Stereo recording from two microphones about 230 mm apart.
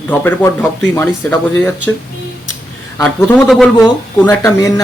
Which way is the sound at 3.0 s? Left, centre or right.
Centre.